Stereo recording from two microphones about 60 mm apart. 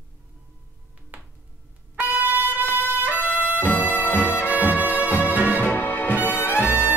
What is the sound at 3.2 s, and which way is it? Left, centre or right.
Music, left.